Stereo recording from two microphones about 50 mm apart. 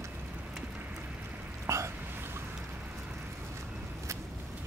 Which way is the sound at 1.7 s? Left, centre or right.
Right.